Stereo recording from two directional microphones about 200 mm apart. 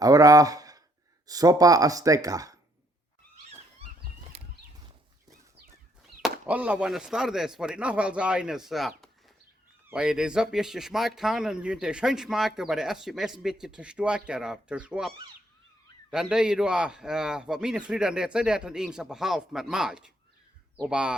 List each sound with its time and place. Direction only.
0.0 s speech: 20° right (ahead or behind)
4.3 s bird flight: 30° right (ahead or behind)
6.5 s speech: 10° right (ahead or behind)